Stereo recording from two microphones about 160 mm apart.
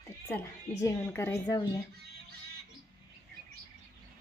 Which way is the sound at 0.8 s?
20° left (ahead or behind).